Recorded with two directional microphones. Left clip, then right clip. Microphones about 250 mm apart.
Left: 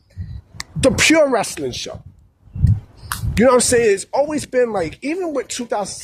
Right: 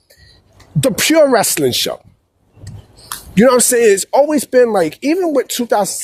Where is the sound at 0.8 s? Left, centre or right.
Right.